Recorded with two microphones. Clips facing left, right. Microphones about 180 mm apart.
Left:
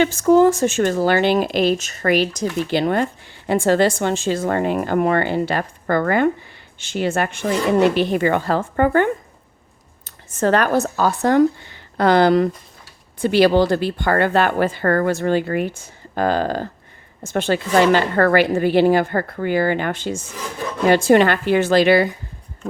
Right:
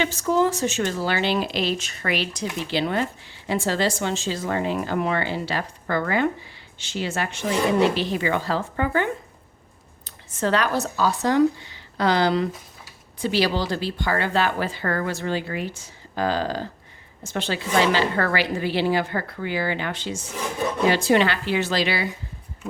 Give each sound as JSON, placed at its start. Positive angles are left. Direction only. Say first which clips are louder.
{"t": 0.0, "sound": "speech", "louder": "left 8 dB", "side_deg": 50}
{"t": 20.2, "sound": "speech", "louder": "right 2 dB", "side_deg": -15}
{"t": 20.8, "sound": "speech", "louder": "left 6 dB", "side_deg": 50}